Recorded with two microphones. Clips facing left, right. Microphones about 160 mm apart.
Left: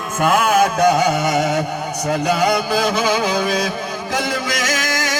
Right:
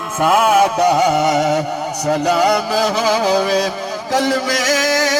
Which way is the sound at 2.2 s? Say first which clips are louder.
Right 2 dB; 35° right (ahead or behind).